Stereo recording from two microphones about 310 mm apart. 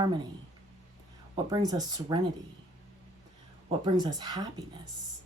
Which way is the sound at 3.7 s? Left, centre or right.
Centre.